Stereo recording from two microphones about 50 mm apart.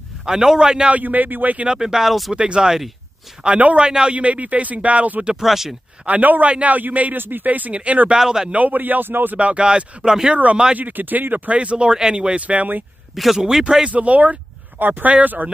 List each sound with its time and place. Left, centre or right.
0.2 s a man's voice: centre
0.9 s speech: right
1.7 s a man's voice: centre
2.3 s speech: centre
5.4 s speech: centre
6.0 s speech: right
8.2 s a man's voice: centre
8.5 s speech: right
9.4 s speech: right
10.3 s speech: right
10.8 s speech: right
13.1 s speech: centre
13.4 s a man's voice: centre
13.8 s speech: right